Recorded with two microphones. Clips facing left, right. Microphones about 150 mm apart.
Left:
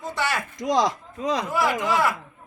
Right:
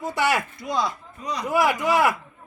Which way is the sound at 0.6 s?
90° left.